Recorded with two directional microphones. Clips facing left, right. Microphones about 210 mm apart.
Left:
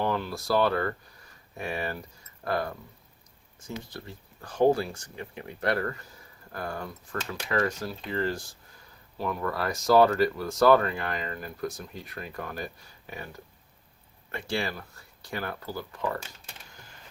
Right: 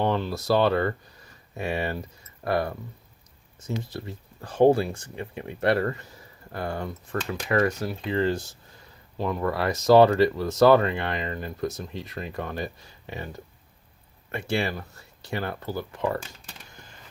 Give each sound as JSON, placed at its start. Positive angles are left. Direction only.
{"t": 0.0, "sound": "speech", "side_deg": -25}
{"t": 3.8, "sound": "speech", "side_deg": -25}
{"t": 14.3, "sound": "speech", "side_deg": -20}